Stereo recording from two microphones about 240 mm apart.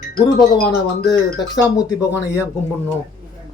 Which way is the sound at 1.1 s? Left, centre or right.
Centre.